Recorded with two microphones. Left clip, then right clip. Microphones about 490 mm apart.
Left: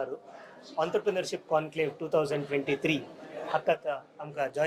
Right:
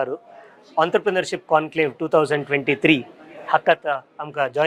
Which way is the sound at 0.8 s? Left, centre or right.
Right.